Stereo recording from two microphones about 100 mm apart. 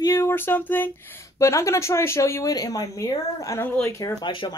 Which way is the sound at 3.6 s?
25° left (ahead or behind).